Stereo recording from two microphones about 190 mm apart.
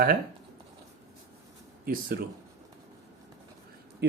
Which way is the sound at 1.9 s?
50° right (ahead or behind).